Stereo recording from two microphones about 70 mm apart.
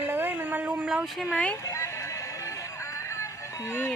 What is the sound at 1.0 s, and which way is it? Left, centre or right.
Speech, centre.